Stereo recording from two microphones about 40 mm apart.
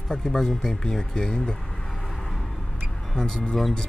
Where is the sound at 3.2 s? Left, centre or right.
Centre.